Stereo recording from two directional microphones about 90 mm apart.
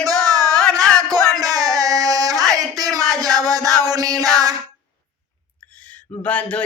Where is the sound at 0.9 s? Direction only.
45° right (ahead or behind).